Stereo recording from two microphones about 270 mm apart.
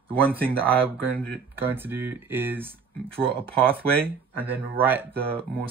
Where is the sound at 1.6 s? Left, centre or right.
Centre.